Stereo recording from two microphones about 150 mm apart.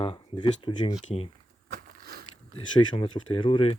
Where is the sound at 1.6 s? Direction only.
65° right (ahead or behind).